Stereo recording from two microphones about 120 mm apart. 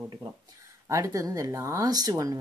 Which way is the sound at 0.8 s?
25° right (ahead or behind).